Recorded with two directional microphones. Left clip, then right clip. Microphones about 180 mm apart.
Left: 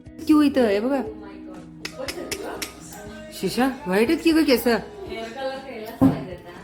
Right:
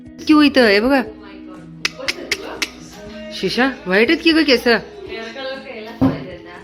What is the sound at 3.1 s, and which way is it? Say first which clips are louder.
Speech: right 7 dB; centre (ahead or behind).